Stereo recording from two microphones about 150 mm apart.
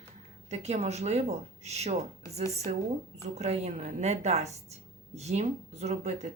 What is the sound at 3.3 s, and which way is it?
A woman's voice, 45° right (ahead or behind).